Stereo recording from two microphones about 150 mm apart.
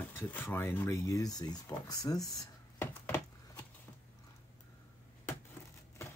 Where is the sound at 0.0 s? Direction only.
15° left (ahead or behind).